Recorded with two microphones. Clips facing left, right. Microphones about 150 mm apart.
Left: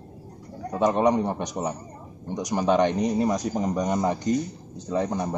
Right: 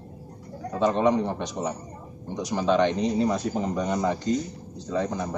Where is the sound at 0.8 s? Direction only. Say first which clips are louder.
Left 1 dB; 15° left (ahead or behind).